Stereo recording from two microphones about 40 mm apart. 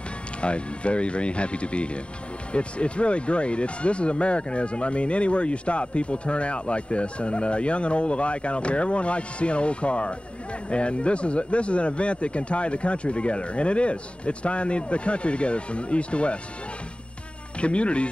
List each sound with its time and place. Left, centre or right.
0.4 s speech: left
17.6 s speech: left